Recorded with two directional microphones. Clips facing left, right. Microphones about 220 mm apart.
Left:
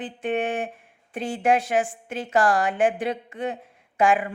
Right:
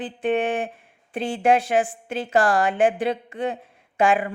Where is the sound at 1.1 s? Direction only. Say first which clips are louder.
Right 2 dB; 30° right (ahead or behind).